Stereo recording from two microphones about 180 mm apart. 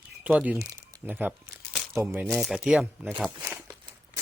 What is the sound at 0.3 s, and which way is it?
Speech, 5° right (ahead or behind).